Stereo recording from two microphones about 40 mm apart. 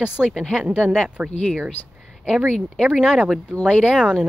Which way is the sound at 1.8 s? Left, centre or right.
Left.